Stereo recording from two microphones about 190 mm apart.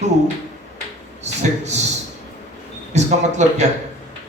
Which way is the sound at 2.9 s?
35° right (ahead or behind).